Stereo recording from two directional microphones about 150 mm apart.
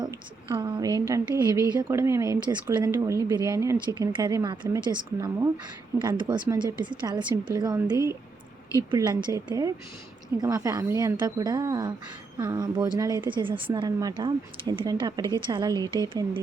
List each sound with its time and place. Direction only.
0.0 s a woman's voice: 30° right (ahead or behind)
8.9 s a woman's voice: 30° right (ahead or behind)